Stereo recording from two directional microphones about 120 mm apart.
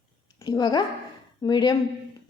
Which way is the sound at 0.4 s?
35° left (ahead or behind).